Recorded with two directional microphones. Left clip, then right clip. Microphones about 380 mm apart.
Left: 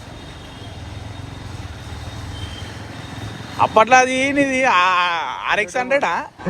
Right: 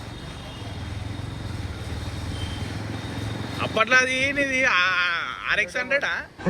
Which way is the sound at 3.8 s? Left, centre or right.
Centre.